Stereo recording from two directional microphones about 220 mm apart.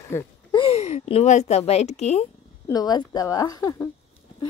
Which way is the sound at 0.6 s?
30° left (ahead or behind).